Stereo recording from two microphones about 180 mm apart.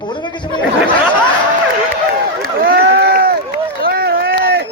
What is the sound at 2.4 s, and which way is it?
Run, 60° right (ahead or behind).